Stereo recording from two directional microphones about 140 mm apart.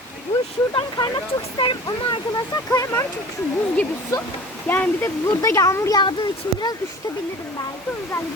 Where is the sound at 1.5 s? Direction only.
35° left (ahead or behind).